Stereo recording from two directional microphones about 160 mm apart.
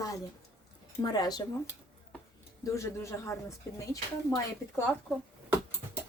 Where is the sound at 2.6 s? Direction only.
20° left (ahead or behind).